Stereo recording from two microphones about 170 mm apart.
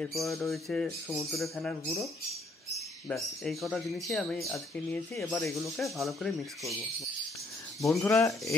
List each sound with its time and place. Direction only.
0.0 s speech: centre (ahead or behind)
1.0 s a man's voice: 15° right (ahead or behind)
1.3 s speech: centre (ahead or behind)
3.1 s speech: centre (ahead or behind)
7.8 s speech: 20° left (ahead or behind)